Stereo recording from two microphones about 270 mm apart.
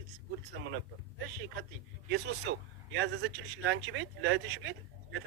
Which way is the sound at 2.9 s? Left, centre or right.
Right.